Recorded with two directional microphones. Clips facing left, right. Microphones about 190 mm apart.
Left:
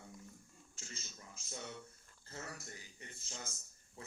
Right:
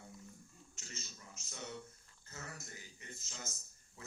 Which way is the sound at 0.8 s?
30° left (ahead or behind).